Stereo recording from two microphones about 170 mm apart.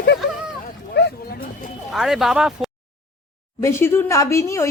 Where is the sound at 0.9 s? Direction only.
75° left (ahead or behind).